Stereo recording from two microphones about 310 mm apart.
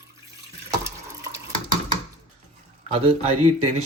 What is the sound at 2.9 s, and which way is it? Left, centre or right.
Speech, centre.